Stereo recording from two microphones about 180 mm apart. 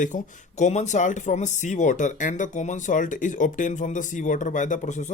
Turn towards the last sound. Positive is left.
turn(degrees=40)  # may be behind; listen again after turning